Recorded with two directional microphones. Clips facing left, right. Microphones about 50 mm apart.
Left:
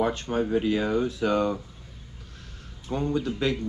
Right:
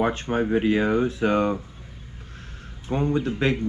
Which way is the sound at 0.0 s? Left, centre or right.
Right.